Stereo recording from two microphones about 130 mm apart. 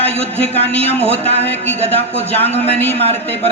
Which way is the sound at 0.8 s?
50° right (ahead or behind).